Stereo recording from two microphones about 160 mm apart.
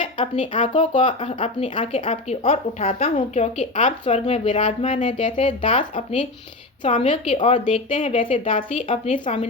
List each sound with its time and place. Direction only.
0.2 s speech: 35° left (ahead or behind)
5.0 s speech: 35° left (ahead or behind)
7.3 s speech: 35° left (ahead or behind)
9.1 s speech: 50° left (ahead or behind)